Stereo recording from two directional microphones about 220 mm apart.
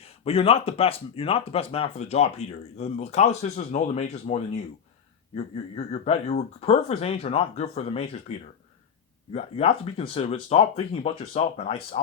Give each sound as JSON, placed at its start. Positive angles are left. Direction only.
{"t": 0.0, "sound": "speech", "side_deg": 25}
{"t": 9.3, "sound": "speech", "side_deg": 25}